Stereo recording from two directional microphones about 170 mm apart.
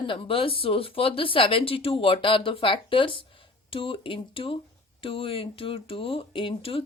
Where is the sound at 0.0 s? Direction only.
30° left (ahead or behind).